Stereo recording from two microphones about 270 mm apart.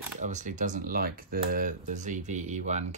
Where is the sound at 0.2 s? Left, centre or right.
Right.